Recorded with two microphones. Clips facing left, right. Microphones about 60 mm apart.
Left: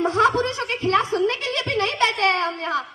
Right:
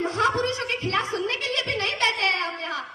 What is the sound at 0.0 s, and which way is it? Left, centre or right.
Chuckle, left.